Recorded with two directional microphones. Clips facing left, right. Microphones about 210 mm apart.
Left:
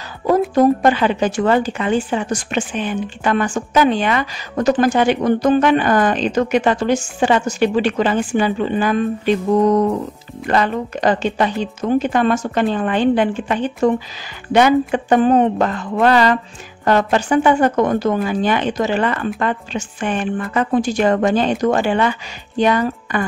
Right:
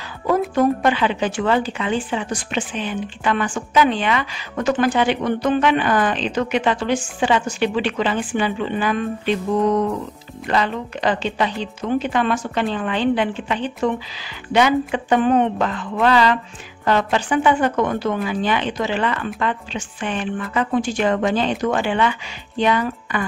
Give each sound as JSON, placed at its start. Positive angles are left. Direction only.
{"t": 0.6, "sound": "a woman's voice", "side_deg": 40}